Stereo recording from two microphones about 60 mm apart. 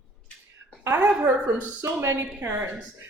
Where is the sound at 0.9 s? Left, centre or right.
Right.